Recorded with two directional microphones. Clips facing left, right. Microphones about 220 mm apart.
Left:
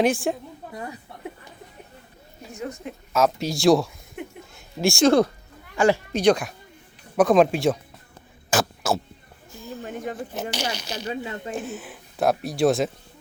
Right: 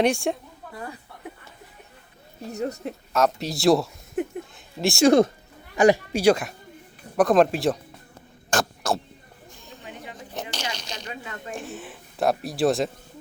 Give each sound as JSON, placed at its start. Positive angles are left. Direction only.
{"t": 0.0, "sound": "speech", "side_deg": 0}
{"t": 2.5, "sound": "speech", "side_deg": -40}
{"t": 3.1, "sound": "speech", "side_deg": 0}
{"t": 5.0, "sound": "speech", "side_deg": -20}
{"t": 8.4, "sound": "a sound", "side_deg": 0}
{"t": 9.8, "sound": "a sound", "side_deg": 45}
{"t": 10.5, "sound": "speech", "side_deg": 10}
{"t": 11.1, "sound": "speech", "side_deg": 30}
{"t": 11.5, "sound": "speech", "side_deg": 0}